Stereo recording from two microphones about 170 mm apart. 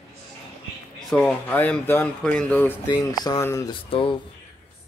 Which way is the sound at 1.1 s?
10° left (ahead or behind).